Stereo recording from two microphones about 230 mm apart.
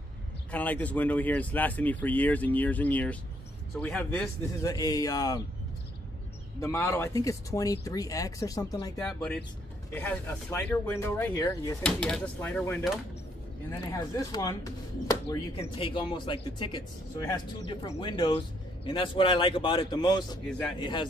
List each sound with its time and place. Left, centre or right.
0.5 s speech: centre
6.6 s speech: centre
9.0 s speech: centre
11.8 s speech: centre
13.9 s speech: centre